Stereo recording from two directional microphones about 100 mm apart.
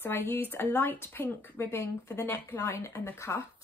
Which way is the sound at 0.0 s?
20° left (ahead or behind).